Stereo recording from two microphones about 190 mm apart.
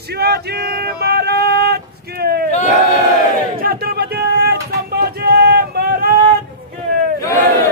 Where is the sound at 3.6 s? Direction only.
55° right (ahead or behind).